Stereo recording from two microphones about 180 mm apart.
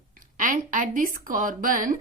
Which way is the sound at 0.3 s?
45° right (ahead or behind).